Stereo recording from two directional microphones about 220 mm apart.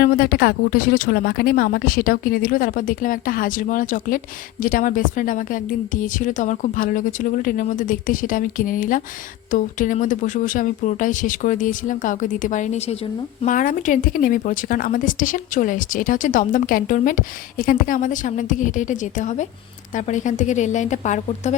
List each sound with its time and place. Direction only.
0.0 s speech: 40° left (ahead or behind)